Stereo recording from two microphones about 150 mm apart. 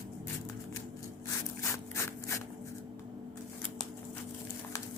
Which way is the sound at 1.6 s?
20° left (ahead or behind).